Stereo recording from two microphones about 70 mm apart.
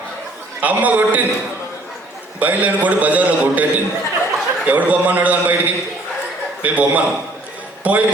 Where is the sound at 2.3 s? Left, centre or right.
Right.